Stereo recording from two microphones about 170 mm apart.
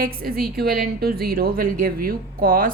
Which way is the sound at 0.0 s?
60° right (ahead or behind).